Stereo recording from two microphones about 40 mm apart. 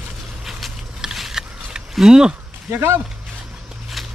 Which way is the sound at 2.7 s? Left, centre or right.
Right.